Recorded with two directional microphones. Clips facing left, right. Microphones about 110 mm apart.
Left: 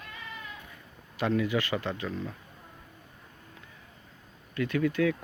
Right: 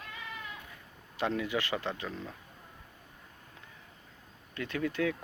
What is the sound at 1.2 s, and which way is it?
Speech, 25° right (ahead or behind).